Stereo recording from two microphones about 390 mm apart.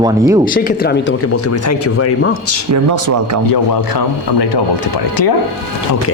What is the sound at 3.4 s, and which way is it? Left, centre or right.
Speech, left.